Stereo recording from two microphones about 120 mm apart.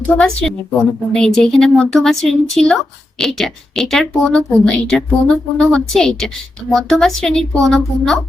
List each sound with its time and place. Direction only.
0.2 s a woman's voice: 5° left (ahead or behind)